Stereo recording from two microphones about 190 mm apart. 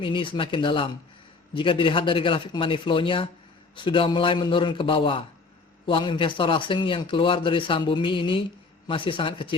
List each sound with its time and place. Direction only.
0.0 s a man's voice: 25° left (ahead or behind)